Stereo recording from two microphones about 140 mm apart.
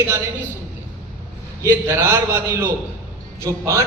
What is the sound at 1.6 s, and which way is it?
A man's voice, 15° right (ahead or behind).